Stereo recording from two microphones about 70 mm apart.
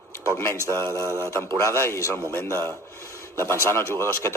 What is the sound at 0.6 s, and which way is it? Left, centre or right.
Speech, right.